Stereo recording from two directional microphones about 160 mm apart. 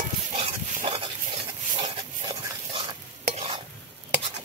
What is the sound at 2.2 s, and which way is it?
Stir, 30° right (ahead or behind).